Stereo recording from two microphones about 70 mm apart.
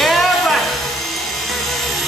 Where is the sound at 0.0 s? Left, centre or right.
Centre.